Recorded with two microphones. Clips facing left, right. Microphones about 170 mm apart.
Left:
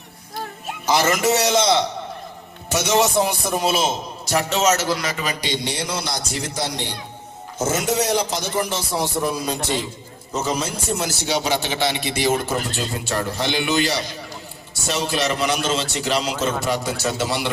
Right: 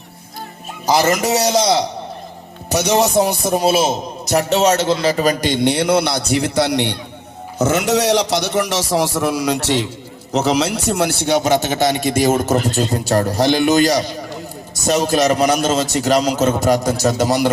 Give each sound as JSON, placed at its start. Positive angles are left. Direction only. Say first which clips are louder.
{"t": 0.9, "sound": "speech", "louder": "right 3 dB", "side_deg": -40}
{"t": 5.1, "sound": "a man's voice", "louder": "right 9 dB", "side_deg": -45}